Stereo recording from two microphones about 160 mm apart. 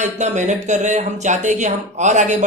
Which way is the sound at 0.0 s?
45° right (ahead or behind).